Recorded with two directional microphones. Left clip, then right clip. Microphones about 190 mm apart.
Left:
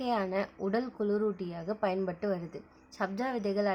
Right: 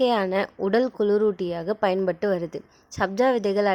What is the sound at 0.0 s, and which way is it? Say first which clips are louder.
A woman's voice: right 10 dB; 50° right (ahead or behind).